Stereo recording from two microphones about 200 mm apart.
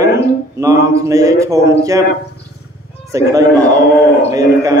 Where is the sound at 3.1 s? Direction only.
15° right (ahead or behind).